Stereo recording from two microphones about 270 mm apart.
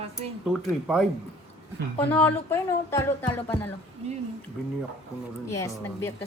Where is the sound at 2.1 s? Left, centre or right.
Centre.